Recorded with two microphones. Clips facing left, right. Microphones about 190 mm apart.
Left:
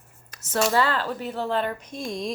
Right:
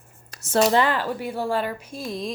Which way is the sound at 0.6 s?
20° right (ahead or behind).